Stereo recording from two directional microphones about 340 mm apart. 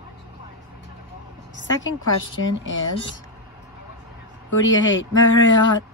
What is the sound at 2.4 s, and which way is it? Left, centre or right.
Speech, left.